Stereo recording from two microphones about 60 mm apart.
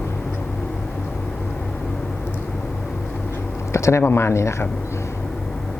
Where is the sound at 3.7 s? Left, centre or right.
Left.